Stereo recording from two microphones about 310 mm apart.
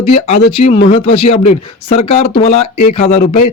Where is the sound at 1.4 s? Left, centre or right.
Left.